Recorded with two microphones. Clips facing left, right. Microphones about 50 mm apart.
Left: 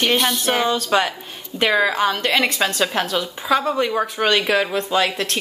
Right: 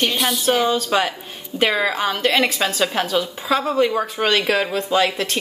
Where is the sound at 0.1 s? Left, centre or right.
Left.